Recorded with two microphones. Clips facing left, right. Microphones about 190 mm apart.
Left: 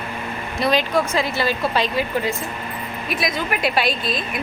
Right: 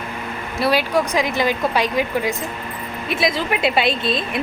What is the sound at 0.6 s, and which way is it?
Speech, 10° right (ahead or behind).